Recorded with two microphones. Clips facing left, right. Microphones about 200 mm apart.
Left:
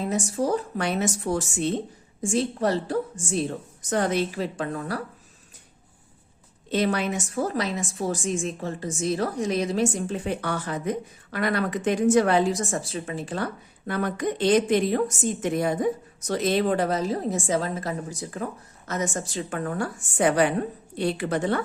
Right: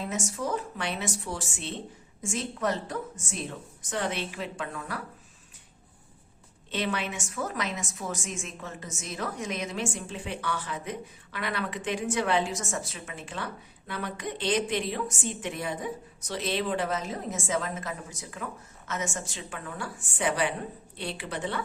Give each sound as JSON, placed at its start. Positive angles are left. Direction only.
{"t": 0.0, "sound": "a woman's voice", "side_deg": 35}
{"t": 2.2, "sound": "a woman's voice", "side_deg": 35}
{"t": 6.7, "sound": "a woman's voice", "side_deg": 40}